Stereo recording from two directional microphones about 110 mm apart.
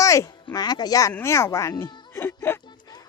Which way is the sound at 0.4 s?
40° left (ahead or behind).